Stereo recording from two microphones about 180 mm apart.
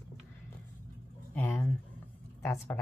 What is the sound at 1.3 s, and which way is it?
Speech, 10° left (ahead or behind).